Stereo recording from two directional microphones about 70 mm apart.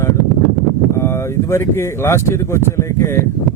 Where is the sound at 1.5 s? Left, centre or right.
Left.